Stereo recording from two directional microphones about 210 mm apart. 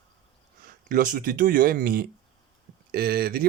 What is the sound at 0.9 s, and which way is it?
Speech, 40° right (ahead or behind).